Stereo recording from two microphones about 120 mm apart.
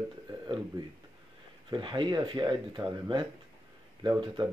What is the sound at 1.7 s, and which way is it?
Speech, 45° right (ahead or behind).